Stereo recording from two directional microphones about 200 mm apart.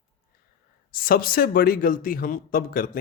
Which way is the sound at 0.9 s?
45° left (ahead or behind).